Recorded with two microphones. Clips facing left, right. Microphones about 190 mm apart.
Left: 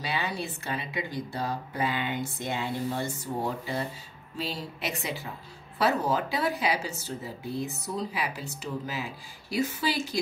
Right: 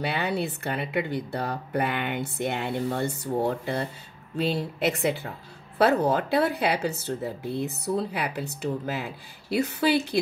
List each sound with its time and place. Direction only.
0.0 s speech: 60° right (ahead or behind)